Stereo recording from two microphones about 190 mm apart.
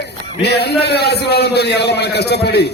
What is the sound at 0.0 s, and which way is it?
A man's voice, 60° left (ahead or behind).